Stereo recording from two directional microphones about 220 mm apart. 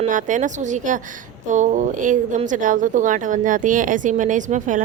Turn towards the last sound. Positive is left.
turn(degrees=-35)  # may be behind; listen again after turning